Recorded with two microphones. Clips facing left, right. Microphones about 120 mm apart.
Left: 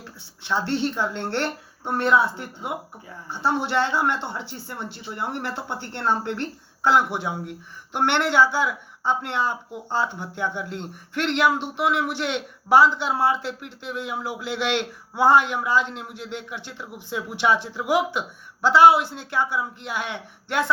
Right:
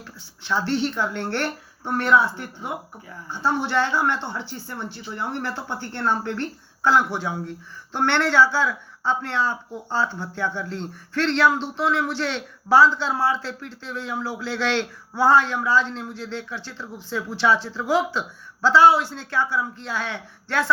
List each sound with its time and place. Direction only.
0.4 s speech: 25° left (ahead or behind)
5.3 s speech: 20° left (ahead or behind)